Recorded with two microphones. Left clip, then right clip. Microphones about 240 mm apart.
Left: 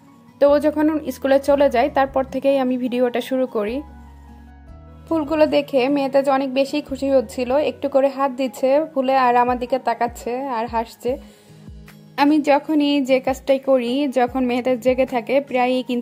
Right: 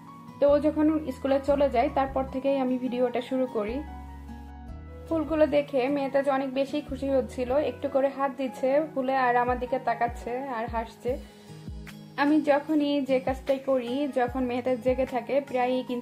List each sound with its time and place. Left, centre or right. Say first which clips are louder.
0.4 s a woman's voice: left 7 dB; left
5.1 s a woman's voice: left 6 dB; left
12.2 s a woman's voice: left 7 dB; left